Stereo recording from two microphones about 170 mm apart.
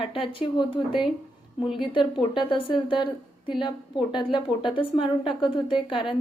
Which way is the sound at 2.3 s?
30° left (ahead or behind).